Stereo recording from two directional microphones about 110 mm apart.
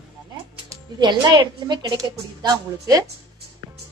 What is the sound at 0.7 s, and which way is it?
A woman's voice, 40° right (ahead or behind).